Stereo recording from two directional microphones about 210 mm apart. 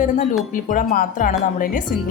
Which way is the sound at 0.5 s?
40° left (ahead or behind).